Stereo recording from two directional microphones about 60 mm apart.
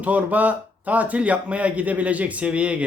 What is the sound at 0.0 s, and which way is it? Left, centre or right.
Speech, right.